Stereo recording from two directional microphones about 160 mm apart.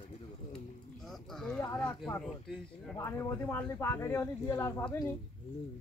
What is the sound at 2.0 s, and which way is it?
Speech, 5° left (ahead or behind).